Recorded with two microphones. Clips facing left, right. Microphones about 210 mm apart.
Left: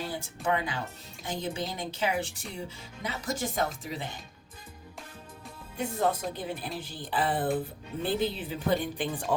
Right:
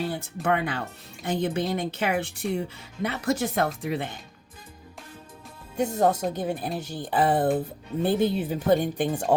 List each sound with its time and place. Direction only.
0.4 s speech: 60° right (ahead or behind)
5.7 s speech: 45° right (ahead or behind)